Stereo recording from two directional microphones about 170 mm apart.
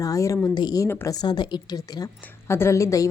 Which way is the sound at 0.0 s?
20° left (ahead or behind).